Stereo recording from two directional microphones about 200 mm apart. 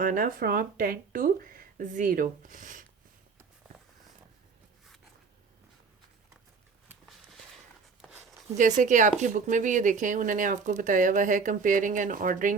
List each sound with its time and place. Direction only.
0.0 s speech: 40° right (ahead or behind)
8.8 s speech: 40° right (ahead or behind)